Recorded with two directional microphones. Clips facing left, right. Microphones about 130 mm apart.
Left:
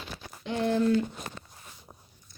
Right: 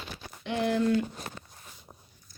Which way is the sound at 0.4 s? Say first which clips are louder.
Even; 35° left (ahead or behind).